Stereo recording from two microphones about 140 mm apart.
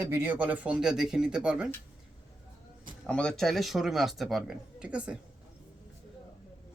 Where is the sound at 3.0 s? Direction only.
5° left (ahead or behind).